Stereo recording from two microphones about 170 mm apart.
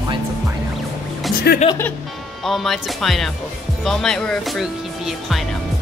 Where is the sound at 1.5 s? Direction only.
75° left (ahead or behind).